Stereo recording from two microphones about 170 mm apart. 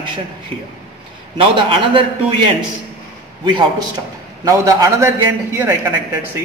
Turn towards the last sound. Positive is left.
turn(degrees=-15)  # may be behind; listen again after turning